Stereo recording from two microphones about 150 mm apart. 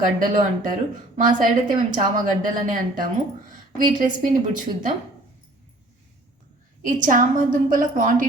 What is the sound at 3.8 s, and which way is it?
Speech, 60° right (ahead or behind).